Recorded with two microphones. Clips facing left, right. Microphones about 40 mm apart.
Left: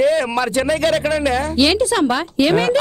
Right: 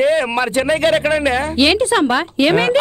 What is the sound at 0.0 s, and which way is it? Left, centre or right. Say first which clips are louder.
Speech: right 1 dB; right.